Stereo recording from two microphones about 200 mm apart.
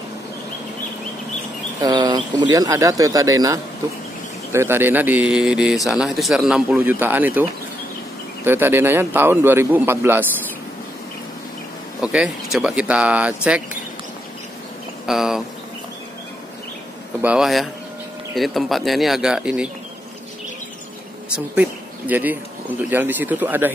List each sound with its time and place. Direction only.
1.8 s a man's voice: 20° right (ahead or behind)
8.5 s a man's voice: 10° right (ahead or behind)
12.0 s speech: 5° right (ahead or behind)
15.0 s speech: centre (ahead or behind)
17.2 s speech: 5° right (ahead or behind)
21.5 s a man's voice: 10° right (ahead or behind)